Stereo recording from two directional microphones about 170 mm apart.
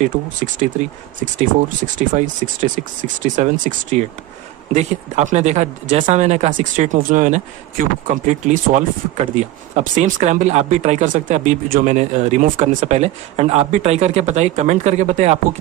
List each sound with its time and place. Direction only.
0.0 s speech: 50° right (ahead or behind)
2.0 s speech: 50° right (ahead or behind)